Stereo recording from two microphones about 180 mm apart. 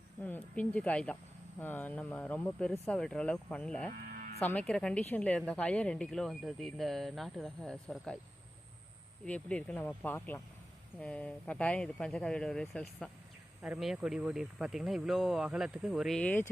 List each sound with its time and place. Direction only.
0.2 s speech: 10° left (ahead or behind)
3.9 s music: 55° right (ahead or behind)
4.4 s speech: 5° left (ahead or behind)
9.2 s speech: 5° left (ahead or behind)